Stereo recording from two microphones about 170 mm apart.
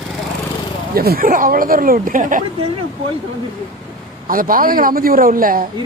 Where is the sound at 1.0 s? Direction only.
60° right (ahead or behind).